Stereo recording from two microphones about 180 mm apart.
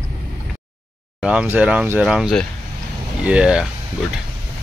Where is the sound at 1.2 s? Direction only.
5° right (ahead or behind).